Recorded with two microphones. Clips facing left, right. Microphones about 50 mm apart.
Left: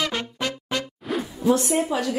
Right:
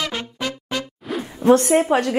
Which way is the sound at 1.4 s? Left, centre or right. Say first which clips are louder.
Right 7 dB; right.